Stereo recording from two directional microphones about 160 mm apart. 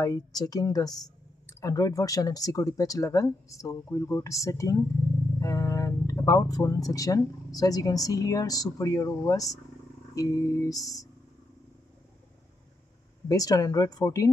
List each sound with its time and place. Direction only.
0.0 s speech: 20° left (ahead or behind)
13.3 s speech: 20° left (ahead or behind)